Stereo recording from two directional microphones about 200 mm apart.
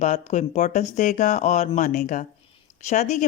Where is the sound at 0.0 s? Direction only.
35° left (ahead or behind).